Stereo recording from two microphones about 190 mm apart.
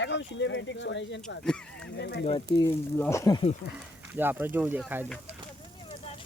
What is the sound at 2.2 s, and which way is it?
Speech, 25° left (ahead or behind).